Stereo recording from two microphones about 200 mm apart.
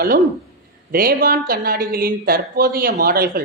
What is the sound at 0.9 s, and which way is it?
Speech, 45° right (ahead or behind).